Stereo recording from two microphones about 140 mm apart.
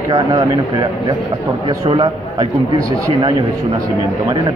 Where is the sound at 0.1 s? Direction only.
30° right (ahead or behind).